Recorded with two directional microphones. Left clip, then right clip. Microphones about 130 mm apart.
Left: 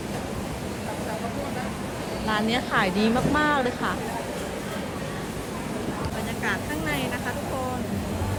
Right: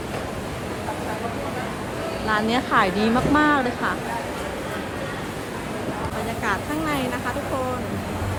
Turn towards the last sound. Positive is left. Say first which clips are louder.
# right 3 dB
turn(degrees=-30)  # may be behind; listen again after turning